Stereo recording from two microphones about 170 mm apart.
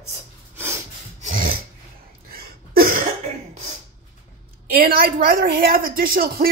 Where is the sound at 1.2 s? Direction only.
55° right (ahead or behind).